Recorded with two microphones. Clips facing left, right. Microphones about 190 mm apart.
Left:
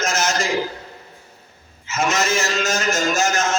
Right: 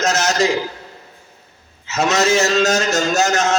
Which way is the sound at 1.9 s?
70° right (ahead or behind).